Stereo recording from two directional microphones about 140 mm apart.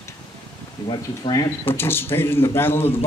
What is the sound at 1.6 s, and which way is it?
Speech, 15° left (ahead or behind).